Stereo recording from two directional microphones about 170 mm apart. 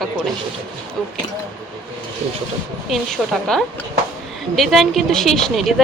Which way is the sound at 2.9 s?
5° left (ahead or behind).